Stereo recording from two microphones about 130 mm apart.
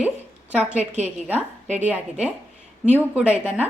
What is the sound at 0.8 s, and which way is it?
Speech, 55° right (ahead or behind).